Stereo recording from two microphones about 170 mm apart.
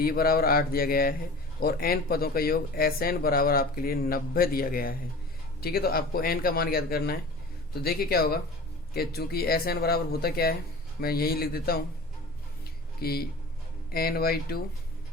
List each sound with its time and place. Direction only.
0.0 s speech: 60° left (ahead or behind)
13.0 s speech: 65° left (ahead or behind)